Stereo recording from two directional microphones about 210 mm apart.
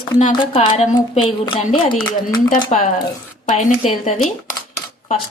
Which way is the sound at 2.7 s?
40° left (ahead or behind).